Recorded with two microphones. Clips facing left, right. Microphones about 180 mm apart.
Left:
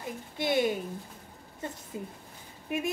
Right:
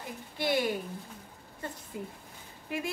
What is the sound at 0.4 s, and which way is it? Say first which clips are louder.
Speech: left 2 dB; 20° left (ahead or behind).